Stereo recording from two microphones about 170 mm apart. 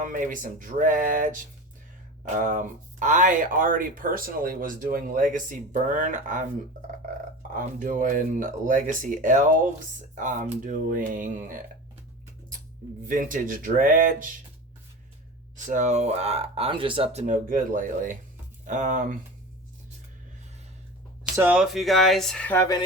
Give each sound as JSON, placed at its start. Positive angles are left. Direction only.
{"t": 0.0, "sound": "speech", "side_deg": -50}
{"t": 7.5, "sound": "speech", "side_deg": -50}
{"t": 13.1, "sound": "speech", "side_deg": -50}
{"t": 15.5, "sound": "speech", "side_deg": -45}
{"t": 21.3, "sound": "speech", "side_deg": -10}